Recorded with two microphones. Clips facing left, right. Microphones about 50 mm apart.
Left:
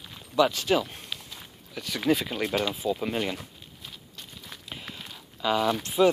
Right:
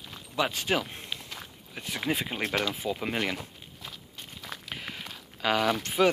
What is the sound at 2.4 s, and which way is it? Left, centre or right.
Speech, right.